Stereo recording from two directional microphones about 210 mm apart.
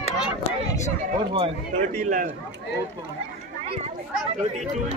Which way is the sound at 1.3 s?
35° right (ahead or behind).